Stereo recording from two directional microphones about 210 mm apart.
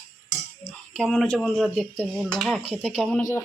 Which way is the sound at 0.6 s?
5° left (ahead or behind).